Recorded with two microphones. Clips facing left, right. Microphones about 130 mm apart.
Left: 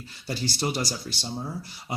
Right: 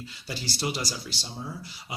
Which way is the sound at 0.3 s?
50° left (ahead or behind).